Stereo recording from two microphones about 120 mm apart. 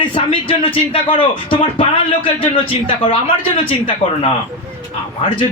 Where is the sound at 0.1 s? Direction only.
50° left (ahead or behind).